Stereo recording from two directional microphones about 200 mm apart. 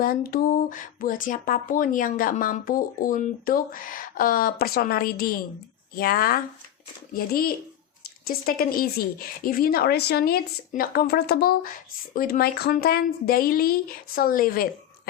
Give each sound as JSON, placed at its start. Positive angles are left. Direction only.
{"t": 0.0, "sound": "speech", "side_deg": 45}